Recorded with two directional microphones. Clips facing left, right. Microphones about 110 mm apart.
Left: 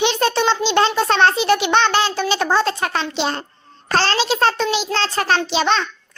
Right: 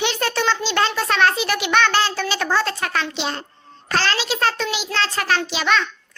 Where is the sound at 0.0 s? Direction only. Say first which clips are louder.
Left 4 dB; 20° left (ahead or behind); by 3.4 s 40° left (ahead or behind).